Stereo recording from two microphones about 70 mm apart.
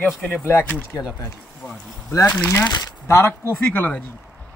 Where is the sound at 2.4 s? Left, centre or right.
Left.